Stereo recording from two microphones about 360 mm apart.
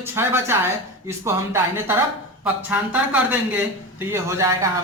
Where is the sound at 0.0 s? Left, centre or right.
Centre.